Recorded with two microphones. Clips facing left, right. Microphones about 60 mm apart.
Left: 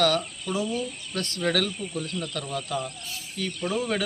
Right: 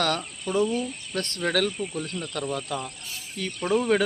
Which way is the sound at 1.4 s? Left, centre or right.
Centre.